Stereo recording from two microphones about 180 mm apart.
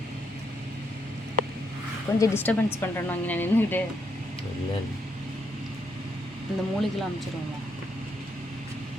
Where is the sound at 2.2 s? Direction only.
15° left (ahead or behind).